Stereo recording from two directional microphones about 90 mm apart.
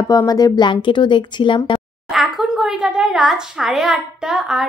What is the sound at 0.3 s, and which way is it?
Speech, 45° left (ahead or behind).